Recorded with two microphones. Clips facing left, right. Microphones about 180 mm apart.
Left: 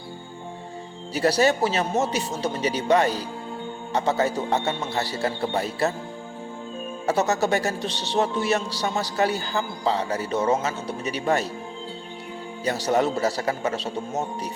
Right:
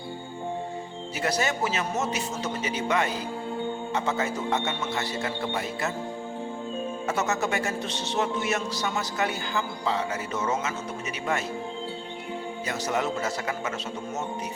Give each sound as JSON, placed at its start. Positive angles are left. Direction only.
{"t": 1.1, "sound": "speech", "side_deg": 35}
{"t": 7.1, "sound": "speech", "side_deg": 35}
{"t": 12.6, "sound": "speech", "side_deg": 35}